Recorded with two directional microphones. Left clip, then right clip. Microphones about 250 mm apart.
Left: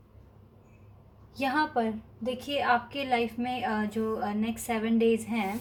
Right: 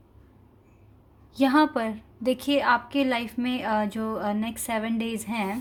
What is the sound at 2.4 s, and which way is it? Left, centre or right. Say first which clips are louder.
A woman's voice: right 3 dB; right.